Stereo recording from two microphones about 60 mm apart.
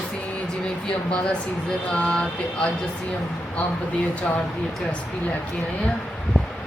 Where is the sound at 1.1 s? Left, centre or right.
Left.